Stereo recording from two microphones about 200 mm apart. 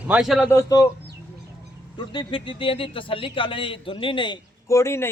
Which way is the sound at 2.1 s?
25° left (ahead or behind).